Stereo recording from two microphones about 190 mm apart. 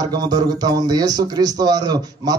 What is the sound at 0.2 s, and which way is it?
A man's voice, 20° right (ahead or behind).